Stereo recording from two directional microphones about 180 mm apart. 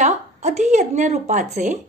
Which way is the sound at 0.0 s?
40° right (ahead or behind).